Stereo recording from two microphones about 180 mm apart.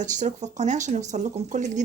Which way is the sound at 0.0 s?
40° right (ahead or behind).